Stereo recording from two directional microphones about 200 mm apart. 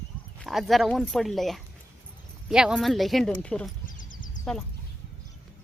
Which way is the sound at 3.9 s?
40° left (ahead or behind).